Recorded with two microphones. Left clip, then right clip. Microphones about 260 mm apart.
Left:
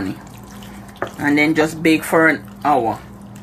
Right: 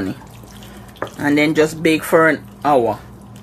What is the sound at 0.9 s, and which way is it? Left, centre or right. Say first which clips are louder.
Speech: even; centre.